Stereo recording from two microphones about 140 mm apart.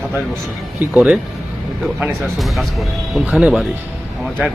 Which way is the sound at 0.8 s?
10° right (ahead or behind).